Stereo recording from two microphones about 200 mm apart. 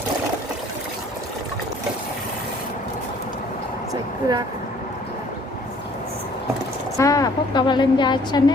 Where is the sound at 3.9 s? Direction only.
20° right (ahead or behind).